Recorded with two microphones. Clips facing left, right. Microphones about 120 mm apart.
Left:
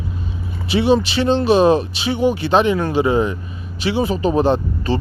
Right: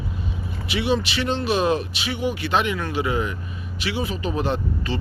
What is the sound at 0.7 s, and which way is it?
Speech, 30° left (ahead or behind).